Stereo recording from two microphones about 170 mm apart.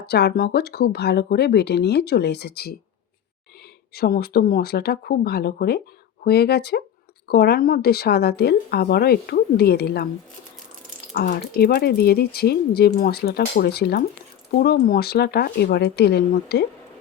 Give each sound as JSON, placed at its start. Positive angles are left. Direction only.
{"t": 0.0, "sound": "speech", "side_deg": 75}
{"t": 3.9, "sound": "speech", "side_deg": 65}
{"t": 11.1, "sound": "speech", "side_deg": 60}